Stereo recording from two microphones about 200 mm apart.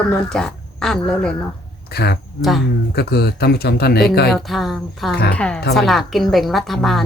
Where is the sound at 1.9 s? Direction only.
55° left (ahead or behind).